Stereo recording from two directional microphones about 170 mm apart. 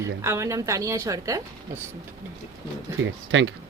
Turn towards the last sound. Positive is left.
turn(degrees=-90)